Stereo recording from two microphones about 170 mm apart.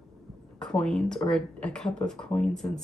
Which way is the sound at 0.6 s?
5° left (ahead or behind).